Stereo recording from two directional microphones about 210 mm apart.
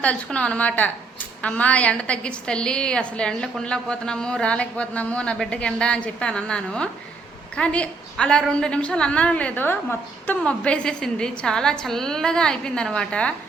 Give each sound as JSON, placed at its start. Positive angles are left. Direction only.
{"t": 0.0, "sound": "a woman's voice", "side_deg": 5}